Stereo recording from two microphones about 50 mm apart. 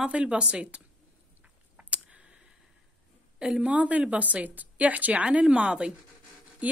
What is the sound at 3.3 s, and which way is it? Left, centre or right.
Speech, centre.